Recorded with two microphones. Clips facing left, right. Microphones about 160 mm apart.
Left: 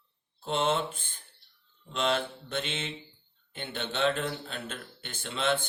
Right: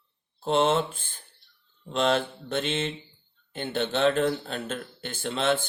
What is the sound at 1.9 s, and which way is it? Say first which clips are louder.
A man's voice: right 5 dB; 45° right (ahead or behind).